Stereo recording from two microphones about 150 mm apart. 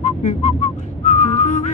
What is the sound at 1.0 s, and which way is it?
Music, 50° left (ahead or behind).